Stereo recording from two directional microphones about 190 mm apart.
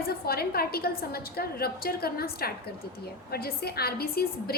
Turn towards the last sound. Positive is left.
turn(degrees=55)  # may be behind; listen again after turning